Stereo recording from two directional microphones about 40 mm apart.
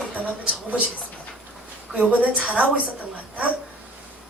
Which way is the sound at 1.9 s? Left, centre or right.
Right.